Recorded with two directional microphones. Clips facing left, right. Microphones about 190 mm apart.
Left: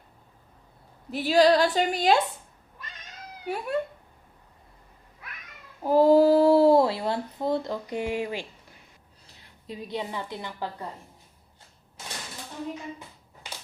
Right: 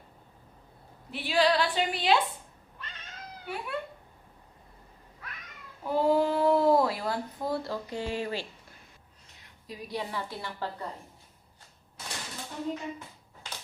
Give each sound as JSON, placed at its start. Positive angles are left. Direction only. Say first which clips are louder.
{"t": 1.1, "sound": "a woman's voice", "louder": "left 6 dB", "side_deg": 40}
{"t": 2.7, "sound": "cat", "louder": "even", "side_deg": 10}
{"t": 3.4, "sound": "speech", "louder": "left 6 dB", "side_deg": 40}
{"t": 5.8, "sound": "speech", "louder": "left 7 dB", "side_deg": 40}
{"t": 9.2, "sound": "a woman's voice", "louder": "left 5 dB", "side_deg": 30}